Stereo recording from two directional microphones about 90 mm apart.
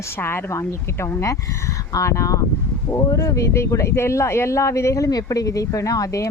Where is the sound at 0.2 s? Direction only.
25° left (ahead or behind).